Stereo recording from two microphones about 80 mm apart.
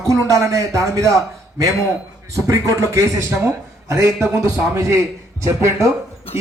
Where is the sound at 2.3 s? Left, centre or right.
Right.